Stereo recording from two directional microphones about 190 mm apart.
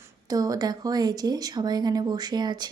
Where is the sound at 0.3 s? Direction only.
20° right (ahead or behind).